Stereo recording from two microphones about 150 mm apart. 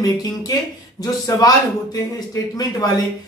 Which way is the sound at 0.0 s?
25° left (ahead or behind).